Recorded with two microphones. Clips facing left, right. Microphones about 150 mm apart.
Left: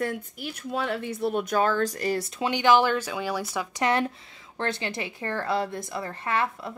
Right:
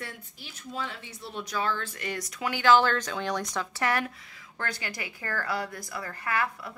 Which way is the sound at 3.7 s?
20° left (ahead or behind).